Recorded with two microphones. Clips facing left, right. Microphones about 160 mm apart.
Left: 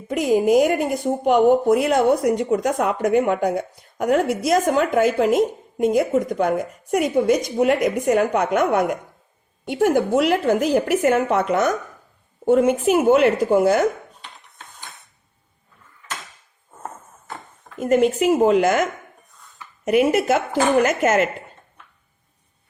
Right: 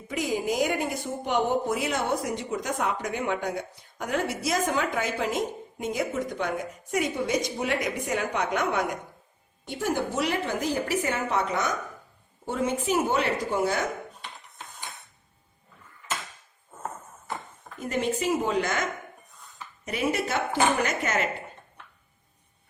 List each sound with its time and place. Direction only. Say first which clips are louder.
0.1 s speech: left 11 dB; 60° left (ahead or behind)
17.7 s speech: left 11 dB; 55° left (ahead or behind)
19.8 s speech: left 13 dB; 60° left (ahead or behind)
20.1 s speech: left 8 dB; 50° left (ahead or behind)